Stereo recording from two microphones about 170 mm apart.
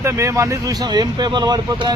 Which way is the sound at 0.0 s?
15° right (ahead or behind).